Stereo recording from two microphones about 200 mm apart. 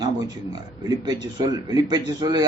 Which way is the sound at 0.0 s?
20° right (ahead or behind).